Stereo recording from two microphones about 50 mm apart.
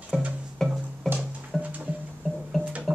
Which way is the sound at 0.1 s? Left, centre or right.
Centre.